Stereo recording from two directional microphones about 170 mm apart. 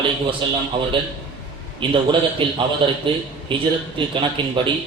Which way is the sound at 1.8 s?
30° right (ahead or behind).